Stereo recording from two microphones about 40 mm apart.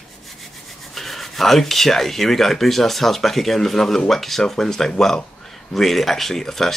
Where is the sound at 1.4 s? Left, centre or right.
Centre.